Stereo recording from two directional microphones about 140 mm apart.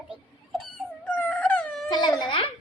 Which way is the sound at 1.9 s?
30° left (ahead or behind).